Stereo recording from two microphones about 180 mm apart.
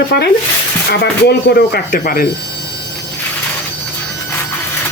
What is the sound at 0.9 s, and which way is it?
Speech, 65° left (ahead or behind).